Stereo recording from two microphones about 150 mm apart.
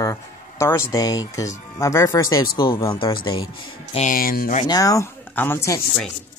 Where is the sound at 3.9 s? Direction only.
65° left (ahead or behind).